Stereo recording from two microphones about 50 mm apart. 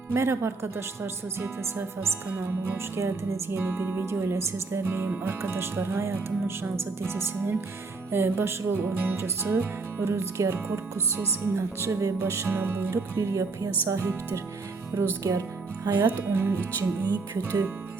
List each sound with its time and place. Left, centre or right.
0.1 s music: right
2.4 s speech: right
3.9 s music: right
4.8 s speech: right
8.1 s music: right
10.7 s speech: right
12.5 s speech: right
13.1 s speech: right
14.9 s speech: right
15.3 s speech: right
16.3 s music: right
17.3 s speech: right